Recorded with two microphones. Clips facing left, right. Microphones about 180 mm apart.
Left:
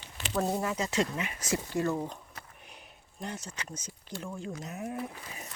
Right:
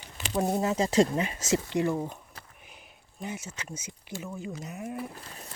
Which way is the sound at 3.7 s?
10° right (ahead or behind).